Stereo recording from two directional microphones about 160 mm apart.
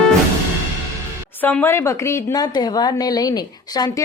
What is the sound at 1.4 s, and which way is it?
A woman's voice, 10° left (ahead or behind).